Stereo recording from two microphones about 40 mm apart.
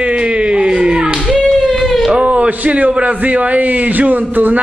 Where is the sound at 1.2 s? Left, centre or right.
Centre.